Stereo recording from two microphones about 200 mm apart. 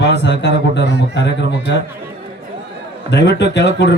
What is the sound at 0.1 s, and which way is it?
A man's voice, 60° left (ahead or behind).